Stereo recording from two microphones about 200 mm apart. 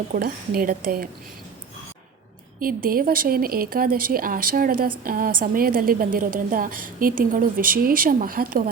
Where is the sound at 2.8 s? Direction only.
45° right (ahead or behind).